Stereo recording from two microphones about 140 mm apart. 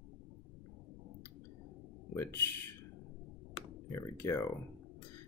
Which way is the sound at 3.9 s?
20° left (ahead or behind).